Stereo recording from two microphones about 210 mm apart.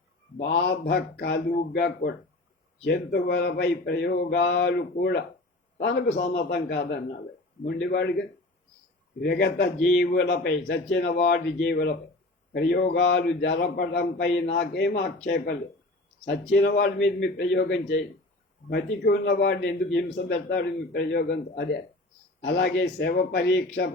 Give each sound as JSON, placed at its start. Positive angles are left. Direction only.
{"t": 0.3, "sound": "a man's voice", "side_deg": 55}
{"t": 9.2, "sound": "a man's voice", "side_deg": 50}